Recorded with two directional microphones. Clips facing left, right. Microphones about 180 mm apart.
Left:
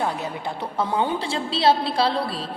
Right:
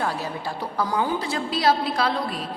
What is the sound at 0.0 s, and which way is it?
A woman's voice, 20° left (ahead or behind).